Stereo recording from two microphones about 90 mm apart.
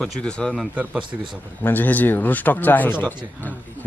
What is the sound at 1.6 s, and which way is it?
Speech, 20° left (ahead or behind).